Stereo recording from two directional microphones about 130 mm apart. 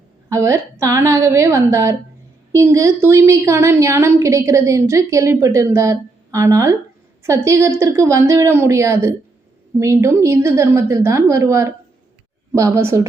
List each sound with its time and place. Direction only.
0.3 s a woman's voice: 25° right (ahead or behind)